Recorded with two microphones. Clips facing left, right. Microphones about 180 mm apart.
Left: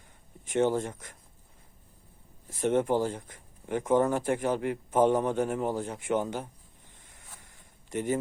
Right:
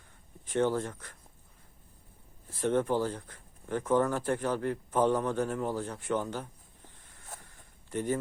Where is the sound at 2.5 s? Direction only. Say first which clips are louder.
Left 2 dB; 20° left (ahead or behind).